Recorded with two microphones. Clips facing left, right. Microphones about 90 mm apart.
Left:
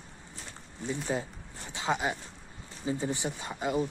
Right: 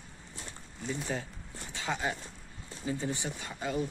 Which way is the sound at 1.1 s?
20° left (ahead or behind).